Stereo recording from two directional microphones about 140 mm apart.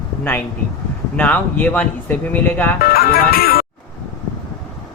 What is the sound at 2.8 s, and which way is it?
Speech, 90° left.